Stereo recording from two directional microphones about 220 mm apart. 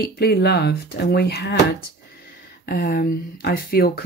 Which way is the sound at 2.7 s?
45° left (ahead or behind).